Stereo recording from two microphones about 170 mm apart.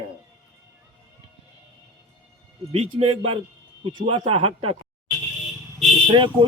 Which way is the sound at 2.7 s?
35° right (ahead or behind).